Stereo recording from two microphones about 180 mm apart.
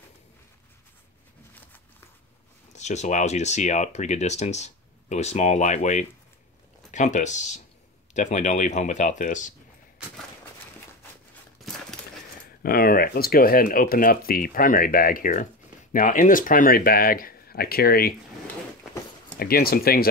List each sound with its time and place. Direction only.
1.5 s a sound: 10° left (ahead or behind)
2.7 s speech: 40° left (ahead or behind)
12.6 s speech: 55° left (ahead or behind)
19.3 s speech: 60° left (ahead or behind)